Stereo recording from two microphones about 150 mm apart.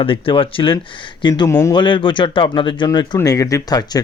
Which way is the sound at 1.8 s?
30° left (ahead or behind).